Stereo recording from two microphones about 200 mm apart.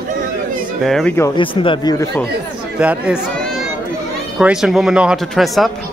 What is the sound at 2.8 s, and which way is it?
Speech, 5° right (ahead or behind).